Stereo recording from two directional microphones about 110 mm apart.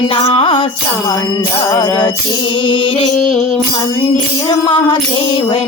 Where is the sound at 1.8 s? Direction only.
40° left (ahead or behind).